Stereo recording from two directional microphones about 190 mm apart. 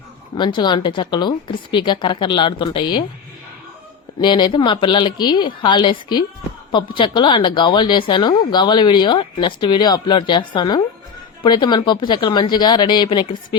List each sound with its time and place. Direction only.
0.3 s speech: 25° left (ahead or behind)
4.2 s speech: 25° left (ahead or behind)